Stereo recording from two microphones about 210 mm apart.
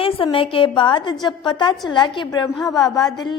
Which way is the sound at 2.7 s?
20° left (ahead or behind).